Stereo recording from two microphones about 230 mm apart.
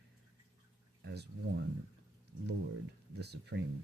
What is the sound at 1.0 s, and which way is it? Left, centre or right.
Speech, right.